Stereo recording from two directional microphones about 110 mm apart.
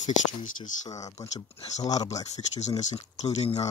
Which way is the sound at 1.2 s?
35° left (ahead or behind).